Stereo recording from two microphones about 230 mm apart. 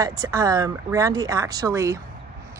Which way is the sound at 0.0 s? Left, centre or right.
Centre.